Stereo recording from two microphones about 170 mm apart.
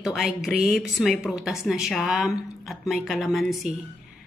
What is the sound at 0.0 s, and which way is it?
A woman's voice, centre (ahead or behind).